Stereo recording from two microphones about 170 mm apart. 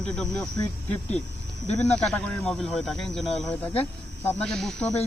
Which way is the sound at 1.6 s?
40° left (ahead or behind).